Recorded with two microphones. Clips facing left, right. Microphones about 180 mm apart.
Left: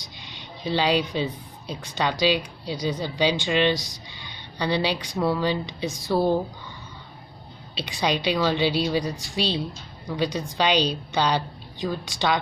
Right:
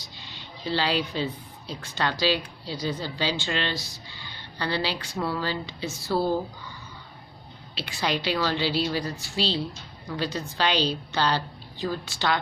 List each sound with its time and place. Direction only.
0.2 s a sound: 15° left (ahead or behind)
1.7 s speech: 15° left (ahead or behind)
7.7 s speech: 15° left (ahead or behind)